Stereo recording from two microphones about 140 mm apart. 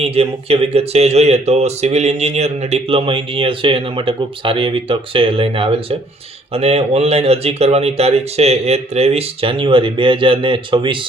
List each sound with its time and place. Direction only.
0.0 s speech: 45° right (ahead or behind)